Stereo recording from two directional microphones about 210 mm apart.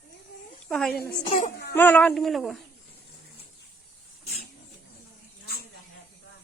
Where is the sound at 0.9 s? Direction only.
45° left (ahead or behind).